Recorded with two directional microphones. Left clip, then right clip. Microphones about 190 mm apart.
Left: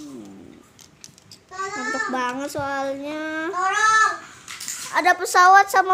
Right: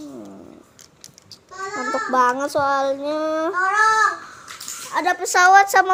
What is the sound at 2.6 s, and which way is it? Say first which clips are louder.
Child singing: right 6 dB; 15° right (ahead or behind).